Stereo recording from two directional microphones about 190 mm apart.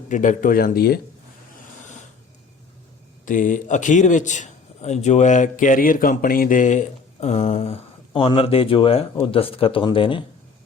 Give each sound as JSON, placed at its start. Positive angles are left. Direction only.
{"t": 0.1, "sound": "speech", "side_deg": 40}
{"t": 3.2, "sound": "a man's voice", "side_deg": 45}